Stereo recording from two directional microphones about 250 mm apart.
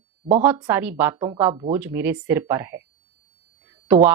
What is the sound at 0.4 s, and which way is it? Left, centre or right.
Speech, centre.